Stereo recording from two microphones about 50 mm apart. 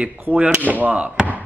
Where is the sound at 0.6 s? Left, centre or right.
Right.